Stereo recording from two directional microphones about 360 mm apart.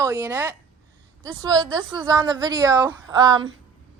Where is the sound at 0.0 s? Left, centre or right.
Centre.